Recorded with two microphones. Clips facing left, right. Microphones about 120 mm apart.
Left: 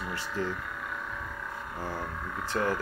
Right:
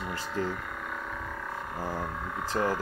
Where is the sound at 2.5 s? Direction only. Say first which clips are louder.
Right 1 dB; 35° right (ahead or behind).